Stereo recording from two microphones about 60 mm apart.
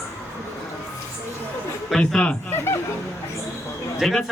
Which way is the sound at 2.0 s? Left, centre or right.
Centre.